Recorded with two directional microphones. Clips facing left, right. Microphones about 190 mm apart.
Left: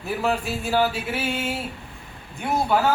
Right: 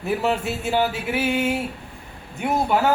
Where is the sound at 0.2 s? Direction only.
25° right (ahead or behind).